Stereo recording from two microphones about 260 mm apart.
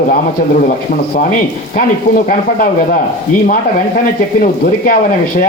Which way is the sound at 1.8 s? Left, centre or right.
Left.